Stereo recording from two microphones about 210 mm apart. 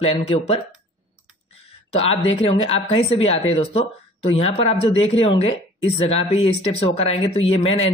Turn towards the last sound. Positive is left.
turn(degrees=30)  # may be behind; listen again after turning